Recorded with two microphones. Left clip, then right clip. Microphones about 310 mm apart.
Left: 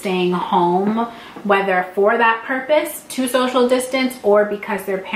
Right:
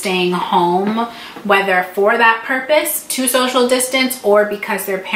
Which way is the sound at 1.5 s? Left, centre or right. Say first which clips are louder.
Right 3 dB; centre.